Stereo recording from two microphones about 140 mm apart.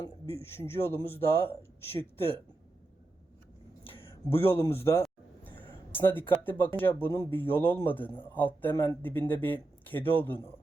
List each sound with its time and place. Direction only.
0.0 s a man's voice: 20° left (ahead or behind)
3.8 s speech: 15° left (ahead or behind)
5.4 s a sound: 15° left (ahead or behind)
6.7 s a man's voice: 15° left (ahead or behind)